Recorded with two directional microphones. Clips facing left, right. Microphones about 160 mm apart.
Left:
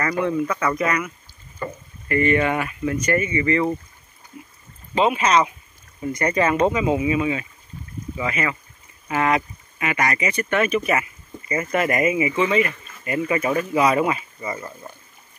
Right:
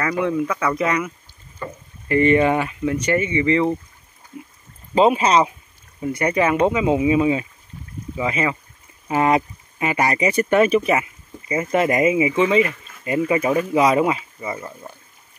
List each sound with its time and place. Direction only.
0.0 s speech: 5° right (ahead or behind)
0.8 s speech: 20° right (ahead or behind)
1.6 s rowboat: 5° left (ahead or behind)
2.0 s speech: 25° right (ahead or behind)
4.9 s speech: 35° right (ahead or behind)
5.9 s speech: 15° right (ahead or behind)